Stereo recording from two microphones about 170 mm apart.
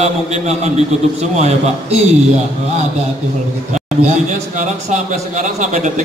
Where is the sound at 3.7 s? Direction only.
45° right (ahead or behind).